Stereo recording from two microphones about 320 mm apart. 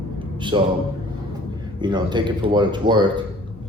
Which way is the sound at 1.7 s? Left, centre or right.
Centre.